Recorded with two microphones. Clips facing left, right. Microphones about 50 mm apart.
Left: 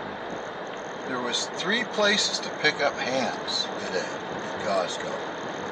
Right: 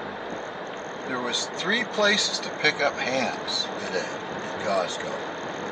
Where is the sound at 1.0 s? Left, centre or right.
Right.